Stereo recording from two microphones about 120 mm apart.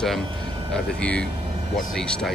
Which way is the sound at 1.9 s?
5° left (ahead or behind).